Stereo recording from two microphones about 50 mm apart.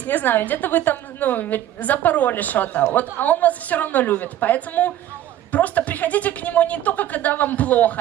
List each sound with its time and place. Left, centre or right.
0.0 s a woman's voice: left